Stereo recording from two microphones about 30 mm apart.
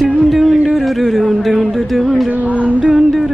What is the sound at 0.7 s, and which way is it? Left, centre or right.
Speech, centre.